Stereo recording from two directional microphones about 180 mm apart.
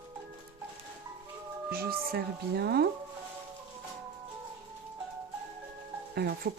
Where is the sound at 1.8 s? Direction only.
60° right (ahead or behind).